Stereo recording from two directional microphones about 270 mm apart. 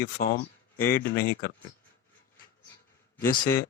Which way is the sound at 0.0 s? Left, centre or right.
Left.